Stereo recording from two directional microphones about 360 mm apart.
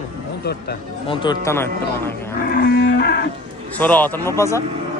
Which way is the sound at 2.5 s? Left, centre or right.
Left.